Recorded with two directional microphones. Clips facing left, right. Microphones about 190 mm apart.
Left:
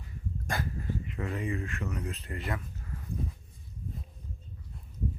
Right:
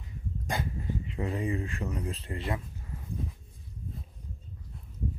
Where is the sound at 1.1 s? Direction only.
30° right (ahead or behind).